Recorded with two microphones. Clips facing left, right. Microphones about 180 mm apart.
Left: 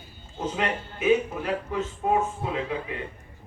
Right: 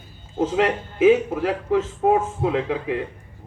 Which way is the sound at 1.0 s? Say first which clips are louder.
Right 7 dB; 90° right.